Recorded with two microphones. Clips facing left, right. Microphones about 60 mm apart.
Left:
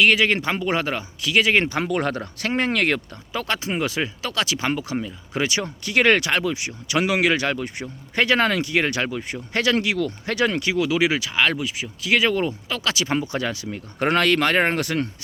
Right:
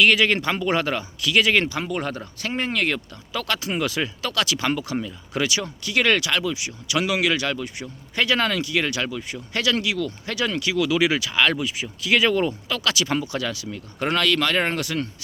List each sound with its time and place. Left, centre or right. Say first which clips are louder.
0.0 s speech: even; centre
1.7 s speech: left 4 dB; left
3.3 s speech: left 1 dB; left
5.5 s speech: left 1 dB; left
10.8 s speech: right 2 dB; centre; by 15.1 s left